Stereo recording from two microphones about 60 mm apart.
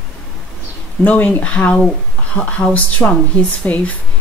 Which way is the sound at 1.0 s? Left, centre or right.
Left.